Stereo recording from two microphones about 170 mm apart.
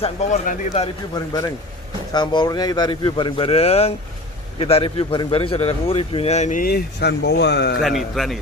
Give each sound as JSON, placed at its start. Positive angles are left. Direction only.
{"t": 0.0, "sound": "a man's voice", "side_deg": 40}
{"t": 2.1, "sound": "a man's voice", "side_deg": 25}
{"t": 7.8, "sound": "a man's voice", "side_deg": 0}